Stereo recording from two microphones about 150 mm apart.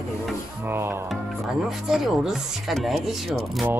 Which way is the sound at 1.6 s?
Centre (ahead or behind).